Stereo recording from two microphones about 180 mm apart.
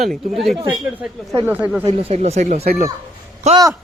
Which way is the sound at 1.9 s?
35° right (ahead or behind).